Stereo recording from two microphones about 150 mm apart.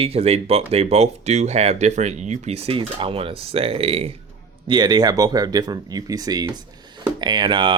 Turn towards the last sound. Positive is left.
turn(degrees=-30)  # may be behind; listen again after turning